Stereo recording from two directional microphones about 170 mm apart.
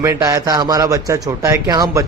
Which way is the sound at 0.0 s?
20° right (ahead or behind).